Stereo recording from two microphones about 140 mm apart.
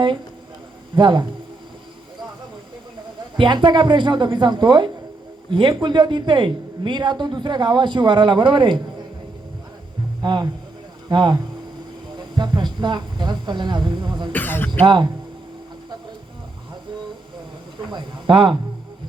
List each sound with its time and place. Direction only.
0.9 s a woman's voice: 35° right (ahead or behind)
3.3 s a woman's voice: 35° right (ahead or behind)
10.2 s music: 30° right (ahead or behind)
11.1 s a woman's voice: 30° right (ahead or behind)
14.3 s a sound: 15° left (ahead or behind)
14.8 s a woman's voice: 35° right (ahead or behind)
17.7 s a sound: 30° right (ahead or behind)